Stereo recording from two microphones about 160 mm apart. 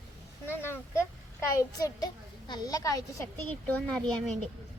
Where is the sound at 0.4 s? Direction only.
15° left (ahead or behind).